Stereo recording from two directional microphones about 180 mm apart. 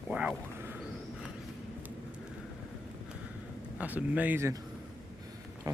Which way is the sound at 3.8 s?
10° right (ahead or behind).